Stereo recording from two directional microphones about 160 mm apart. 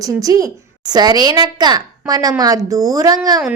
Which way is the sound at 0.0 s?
20° right (ahead or behind).